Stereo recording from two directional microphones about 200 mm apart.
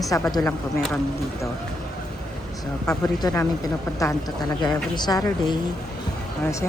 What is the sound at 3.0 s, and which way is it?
A woman's voice, 20° left (ahead or behind).